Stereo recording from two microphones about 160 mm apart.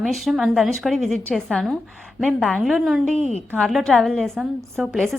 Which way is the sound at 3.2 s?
45° left (ahead or behind).